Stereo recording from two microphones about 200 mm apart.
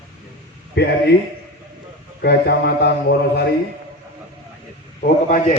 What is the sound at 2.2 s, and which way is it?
Speech, 55° left (ahead or behind).